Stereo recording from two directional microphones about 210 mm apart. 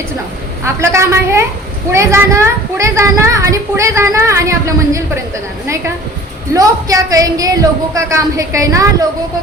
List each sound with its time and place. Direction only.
0.6 s a child's voice: 15° right (ahead or behind)
6.5 s a child's voice: 15° right (ahead or behind)